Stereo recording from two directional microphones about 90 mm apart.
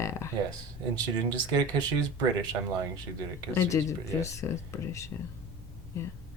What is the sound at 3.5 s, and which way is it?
Speech, 35° left (ahead or behind).